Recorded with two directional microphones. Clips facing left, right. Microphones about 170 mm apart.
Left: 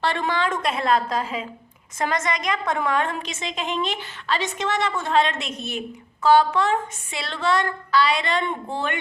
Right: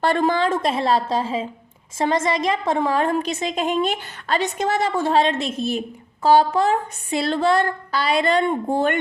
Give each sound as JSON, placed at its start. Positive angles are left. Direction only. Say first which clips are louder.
{"t": 0.0, "sound": "a woman's voice", "louder": "right 5 dB", "side_deg": -40}